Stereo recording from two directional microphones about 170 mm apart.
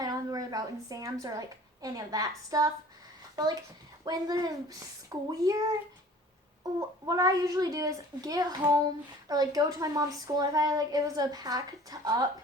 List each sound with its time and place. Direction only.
0.0 s a woman's voice: 20° right (ahead or behind)